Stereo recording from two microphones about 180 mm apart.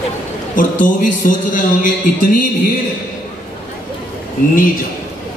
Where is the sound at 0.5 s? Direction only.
50° left (ahead or behind).